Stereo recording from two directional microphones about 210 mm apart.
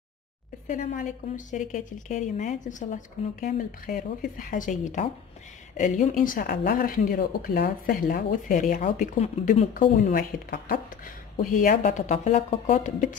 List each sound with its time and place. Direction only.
0.7 s speech: 35° left (ahead or behind)